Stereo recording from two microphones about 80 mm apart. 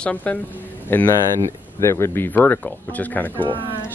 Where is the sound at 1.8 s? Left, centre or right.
Left.